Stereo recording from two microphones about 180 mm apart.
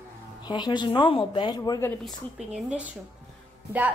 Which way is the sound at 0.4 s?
25° left (ahead or behind).